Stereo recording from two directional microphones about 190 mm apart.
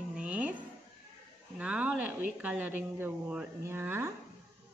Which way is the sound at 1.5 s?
10° right (ahead or behind).